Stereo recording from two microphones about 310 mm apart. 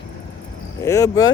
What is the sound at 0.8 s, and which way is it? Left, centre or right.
Speech, centre.